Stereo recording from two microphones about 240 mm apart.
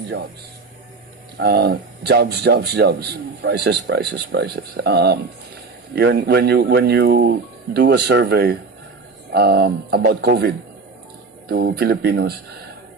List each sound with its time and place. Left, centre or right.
1.4 s a man's voice: right